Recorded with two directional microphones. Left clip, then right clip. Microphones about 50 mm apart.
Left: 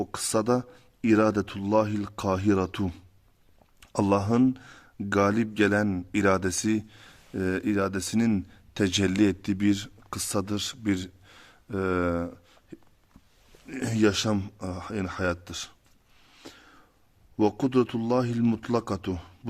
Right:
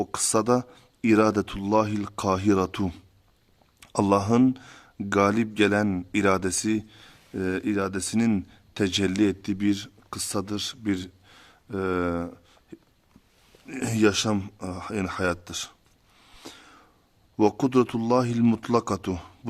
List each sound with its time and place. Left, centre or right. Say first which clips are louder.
0.0 s speech: right 3 dB; right
4.3 s speech: right 2 dB; right
5.9 s speech: right 2 dB; right
6.1 s speech: right 1 dB; centre
6.4 s speech: right 1 dB; centre
9.1 s speech: even; left; by 12.5 s centre
13.7 s speech: right 2 dB; centre
14.6 s speech: right 1 dB; centre
14.8 s speech: right 3 dB; right
16.4 s a sound: right 3 dB; right
17.3 s speech: right 3 dB; right
18.4 s speech: right 3 dB; right
18.7 s speech: right 4 dB; right